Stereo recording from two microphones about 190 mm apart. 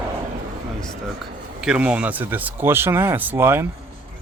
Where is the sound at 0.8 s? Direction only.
Centre (ahead or behind).